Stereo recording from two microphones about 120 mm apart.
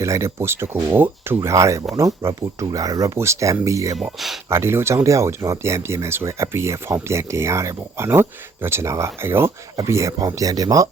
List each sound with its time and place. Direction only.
0.0 s speech: 25° right (ahead or behind)
3.9 s speech: centre (ahead or behind)
4.4 s speech: 20° right (ahead or behind)